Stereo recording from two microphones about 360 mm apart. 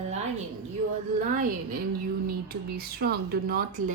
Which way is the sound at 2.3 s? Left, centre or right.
Right.